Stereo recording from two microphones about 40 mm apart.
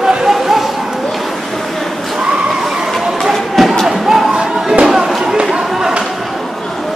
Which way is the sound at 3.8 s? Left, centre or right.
Centre.